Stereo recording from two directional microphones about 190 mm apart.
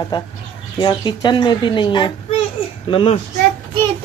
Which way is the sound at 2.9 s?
30° left (ahead or behind).